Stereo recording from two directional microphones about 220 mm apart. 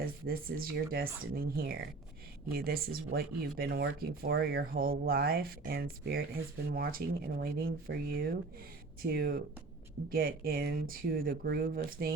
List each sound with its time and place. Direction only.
0.0 s speech: 40° right (ahead or behind)